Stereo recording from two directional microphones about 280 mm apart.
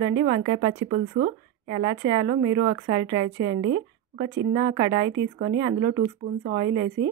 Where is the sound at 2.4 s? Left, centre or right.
Right.